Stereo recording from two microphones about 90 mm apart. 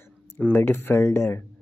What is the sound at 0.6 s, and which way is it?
Speech, 25° left (ahead or behind).